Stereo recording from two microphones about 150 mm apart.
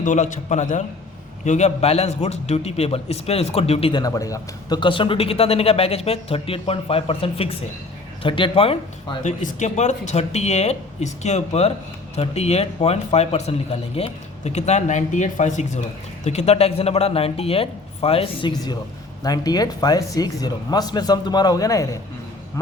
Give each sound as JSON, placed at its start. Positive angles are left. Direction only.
{"t": 0.0, "sound": "speech", "side_deg": 55}
{"t": 4.0, "sound": "a man's voice", "side_deg": 20}
{"t": 9.2, "sound": "a man's voice", "side_deg": 55}